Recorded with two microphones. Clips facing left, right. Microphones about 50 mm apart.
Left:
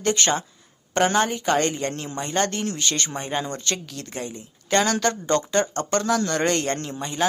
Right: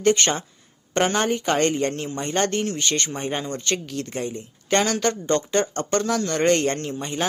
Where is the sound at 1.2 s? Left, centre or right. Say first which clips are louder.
Right 1 dB; right.